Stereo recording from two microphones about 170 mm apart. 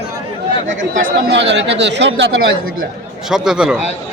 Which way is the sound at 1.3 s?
90° right.